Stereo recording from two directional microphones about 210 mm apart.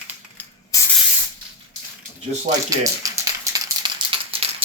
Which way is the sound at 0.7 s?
15° left (ahead or behind).